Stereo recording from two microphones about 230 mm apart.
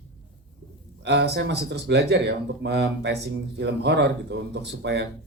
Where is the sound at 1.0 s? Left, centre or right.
Right.